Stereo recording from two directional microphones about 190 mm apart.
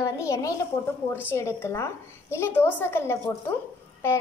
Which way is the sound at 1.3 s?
15° left (ahead or behind).